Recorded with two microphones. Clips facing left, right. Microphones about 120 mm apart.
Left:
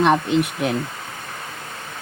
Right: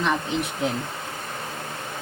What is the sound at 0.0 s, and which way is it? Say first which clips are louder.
Speech: left 7 dB; 70° left (ahead or behind).